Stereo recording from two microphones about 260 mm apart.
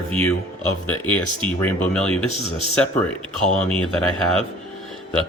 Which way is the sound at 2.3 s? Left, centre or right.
Left.